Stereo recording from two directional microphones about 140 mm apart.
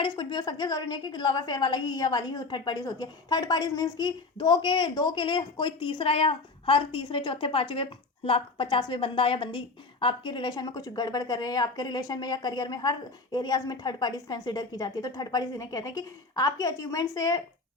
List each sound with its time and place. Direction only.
0.0 s a woman's voice: 30° left (ahead or behind)